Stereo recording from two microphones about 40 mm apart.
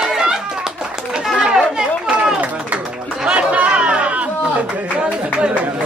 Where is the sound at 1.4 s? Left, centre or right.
Centre.